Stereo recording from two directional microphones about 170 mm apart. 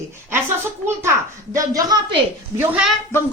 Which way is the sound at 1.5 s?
20° right (ahead or behind).